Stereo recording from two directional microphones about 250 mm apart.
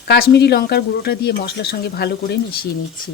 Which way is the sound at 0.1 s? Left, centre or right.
Left.